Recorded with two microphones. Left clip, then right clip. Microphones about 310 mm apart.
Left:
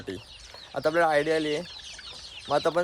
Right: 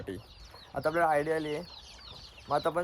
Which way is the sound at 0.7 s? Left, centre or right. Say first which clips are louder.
Left 4 dB; centre.